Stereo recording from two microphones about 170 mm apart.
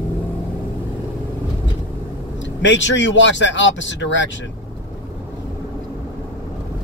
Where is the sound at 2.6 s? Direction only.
90° left.